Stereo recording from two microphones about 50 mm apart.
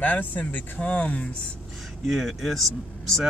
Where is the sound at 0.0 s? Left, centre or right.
Left.